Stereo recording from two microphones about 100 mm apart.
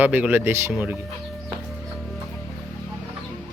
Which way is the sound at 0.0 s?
15° right (ahead or behind).